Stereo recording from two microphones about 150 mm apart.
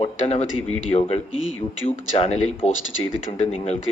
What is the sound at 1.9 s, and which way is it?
A man's voice, 40° left (ahead or behind).